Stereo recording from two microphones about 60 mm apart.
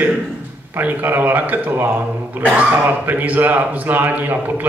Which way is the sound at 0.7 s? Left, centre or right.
Right.